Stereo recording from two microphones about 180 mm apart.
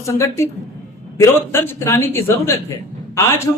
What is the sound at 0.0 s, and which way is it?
A man's voice, 15° left (ahead or behind).